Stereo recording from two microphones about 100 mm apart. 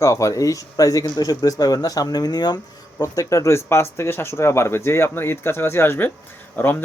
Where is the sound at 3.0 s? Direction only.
30° left (ahead or behind).